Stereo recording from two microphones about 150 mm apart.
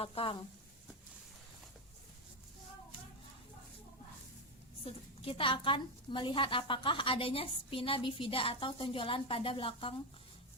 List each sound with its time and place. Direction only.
0.0 s a woman's voice: 40° left (ahead or behind)
4.9 s a woman's voice: 40° left (ahead or behind)